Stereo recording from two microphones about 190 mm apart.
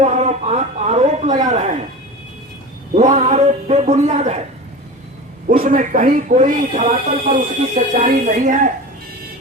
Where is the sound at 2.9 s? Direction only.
40° right (ahead or behind).